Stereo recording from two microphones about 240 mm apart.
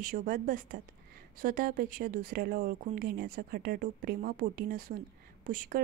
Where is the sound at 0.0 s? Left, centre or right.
Right.